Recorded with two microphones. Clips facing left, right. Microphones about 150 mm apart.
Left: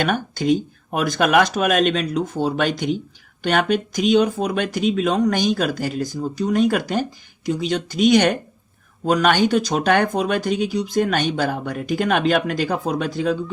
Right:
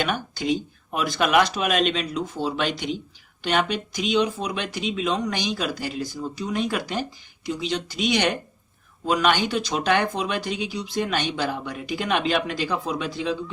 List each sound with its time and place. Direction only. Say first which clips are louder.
0.0 s speech: left 5 dB; 50° left (ahead or behind)